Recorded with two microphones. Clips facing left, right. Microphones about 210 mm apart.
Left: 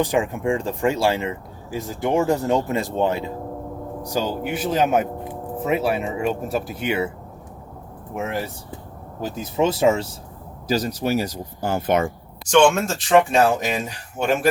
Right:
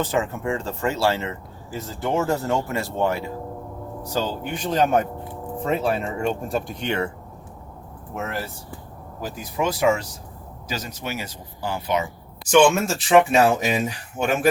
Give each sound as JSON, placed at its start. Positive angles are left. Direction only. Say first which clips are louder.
{"t": 0.0, "sound": "speech", "louder": "left 3 dB", "side_deg": 15}
{"t": 8.1, "sound": "speech", "louder": "left 3 dB", "side_deg": 15}
{"t": 10.7, "sound": "speech", "louder": "left 9 dB", "side_deg": 35}
{"t": 12.5, "sound": "speech", "louder": "even", "side_deg": -5}